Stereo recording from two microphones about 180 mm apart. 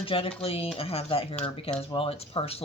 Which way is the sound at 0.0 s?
30° left (ahead or behind).